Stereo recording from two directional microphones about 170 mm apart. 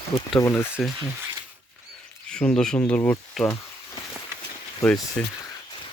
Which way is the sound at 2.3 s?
5° left (ahead or behind).